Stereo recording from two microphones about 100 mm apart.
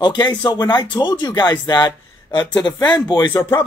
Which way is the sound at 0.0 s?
45° left (ahead or behind).